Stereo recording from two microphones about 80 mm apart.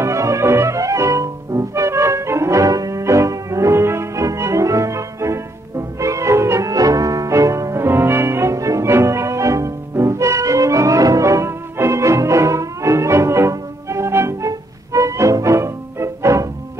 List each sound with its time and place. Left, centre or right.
0.0 s music: right